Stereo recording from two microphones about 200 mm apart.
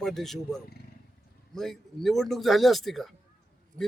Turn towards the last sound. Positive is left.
turn(degrees=-45)  # may be behind; listen again after turning